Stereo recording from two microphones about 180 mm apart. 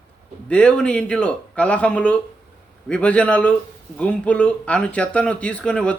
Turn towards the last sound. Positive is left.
turn(degrees=5)  # may be behind; listen again after turning